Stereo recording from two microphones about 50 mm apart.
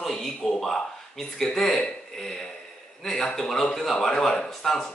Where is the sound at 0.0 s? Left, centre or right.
Centre.